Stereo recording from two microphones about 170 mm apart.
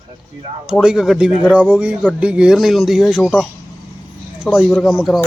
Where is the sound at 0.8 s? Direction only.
5° right (ahead or behind).